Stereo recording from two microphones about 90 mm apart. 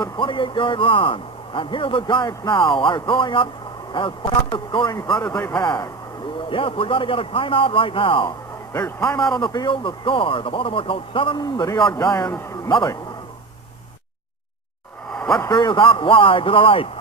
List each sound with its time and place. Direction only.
0.0 s a man's voice: 65° left (ahead or behind)
6.5 s a man's voice: 80° left
9.3 s speech: 55° left (ahead or behind)
9.7 s a man's voice: 75° left (ahead or behind); by 12.9 s 50° left (ahead or behind)
15.1 s a sound: 5° left (ahead or behind)
15.5 s a man's voice: 60° left (ahead or behind); by 16.9 s 85° left